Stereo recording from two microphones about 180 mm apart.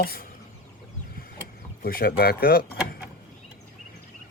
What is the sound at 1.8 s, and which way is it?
Speech, 60° left (ahead or behind).